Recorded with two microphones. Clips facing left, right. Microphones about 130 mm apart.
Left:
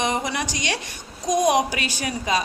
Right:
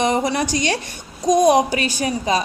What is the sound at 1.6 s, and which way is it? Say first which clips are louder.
Speech: right 5 dB; 40° right (ahead or behind).